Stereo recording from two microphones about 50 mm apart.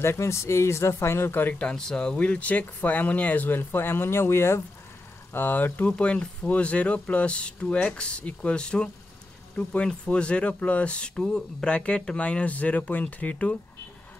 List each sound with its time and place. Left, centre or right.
0.0 s speech: left
1.5 s speech: left
2.1 s speech: left
5.3 s speech: left